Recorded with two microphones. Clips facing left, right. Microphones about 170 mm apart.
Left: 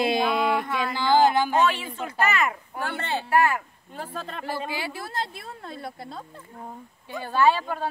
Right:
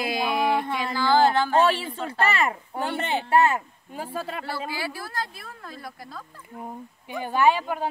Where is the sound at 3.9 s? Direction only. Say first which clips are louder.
Right 3 dB; 10° right (ahead or behind).